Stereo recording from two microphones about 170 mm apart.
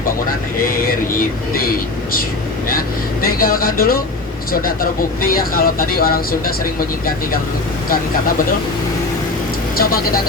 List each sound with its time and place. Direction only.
2.6 s vehicle: 60° left (ahead or behind)
4.5 s speech: 60° left (ahead or behind)